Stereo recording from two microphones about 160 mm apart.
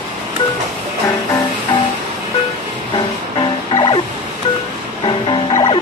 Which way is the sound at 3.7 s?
30° left (ahead or behind).